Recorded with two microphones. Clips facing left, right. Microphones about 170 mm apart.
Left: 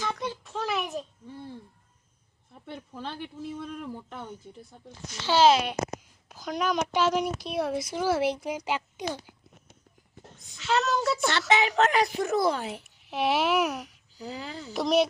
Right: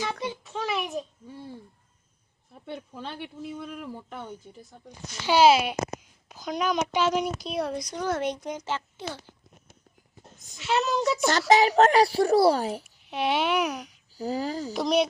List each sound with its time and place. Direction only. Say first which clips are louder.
0.0 s child singing: right 1 dB; 5° right (ahead or behind)
2.6 s speech: right 1 dB; centre (ahead or behind); by 9.3 s 15° left (ahead or behind)
10.3 s a child's voice: right 1 dB; 45° right (ahead or behind)
10.6 s a woman's voice: right 1 dB; 15° right (ahead or behind)
10.8 s speech: right 1 dB; centre (ahead or behind)
11.3 s speech: right 8 dB; 40° right (ahead or behind)
12.8 s a child's voice: even; centre (ahead or behind)
14.1 s speech: right 9 dB; 40° right (ahead or behind)
14.7 s speech: left 1 dB; centre (ahead or behind)